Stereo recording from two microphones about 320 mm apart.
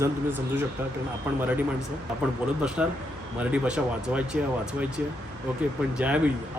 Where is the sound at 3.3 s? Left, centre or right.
Centre.